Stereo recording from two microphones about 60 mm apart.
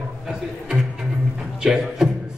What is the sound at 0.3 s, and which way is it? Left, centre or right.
Music, centre.